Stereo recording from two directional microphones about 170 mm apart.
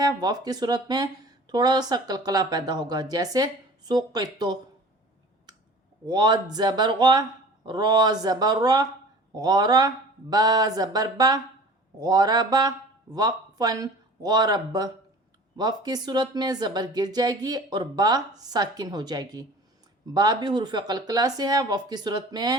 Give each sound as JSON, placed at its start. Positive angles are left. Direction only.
{"t": 0.0, "sound": "speech", "side_deg": -25}
{"t": 6.1, "sound": "speech", "side_deg": -25}